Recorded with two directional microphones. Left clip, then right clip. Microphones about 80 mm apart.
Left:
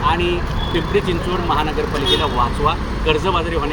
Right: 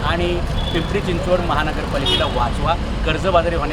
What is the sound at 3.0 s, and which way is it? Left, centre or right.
Speech, right.